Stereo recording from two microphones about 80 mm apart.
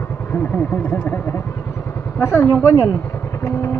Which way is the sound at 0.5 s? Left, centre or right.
Left.